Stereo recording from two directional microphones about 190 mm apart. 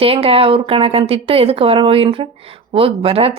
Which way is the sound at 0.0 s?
30° right (ahead or behind).